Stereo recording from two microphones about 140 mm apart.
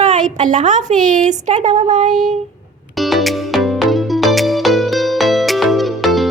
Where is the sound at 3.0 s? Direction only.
Centre (ahead or behind).